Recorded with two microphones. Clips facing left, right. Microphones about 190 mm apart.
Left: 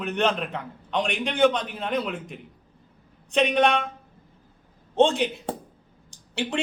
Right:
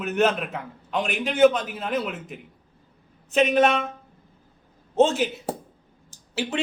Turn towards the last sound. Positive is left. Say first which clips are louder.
# right 1 dB
turn(degrees=-5)  # may be behind; listen again after turning